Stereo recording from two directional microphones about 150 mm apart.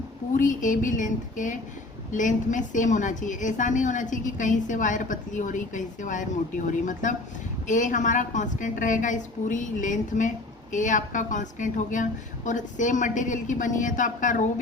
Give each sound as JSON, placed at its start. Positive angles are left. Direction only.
{"t": 0.3, "sound": "a woman's voice", "side_deg": 60}